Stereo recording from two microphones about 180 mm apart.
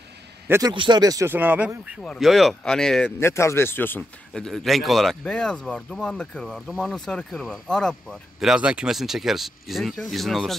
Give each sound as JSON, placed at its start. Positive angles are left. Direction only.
{"t": 0.5, "sound": "speech", "side_deg": -20}
{"t": 3.2, "sound": "speech", "side_deg": 15}